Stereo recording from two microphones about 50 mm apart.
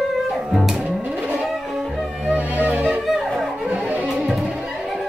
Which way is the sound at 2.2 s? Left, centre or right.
Right.